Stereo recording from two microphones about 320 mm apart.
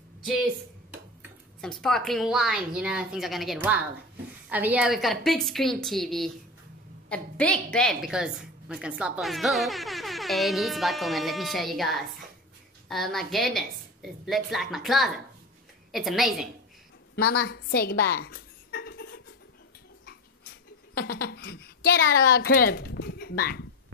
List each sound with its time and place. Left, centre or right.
1.6 s a woman's voice: centre
17.1 s a sound: left
20.9 s speech: left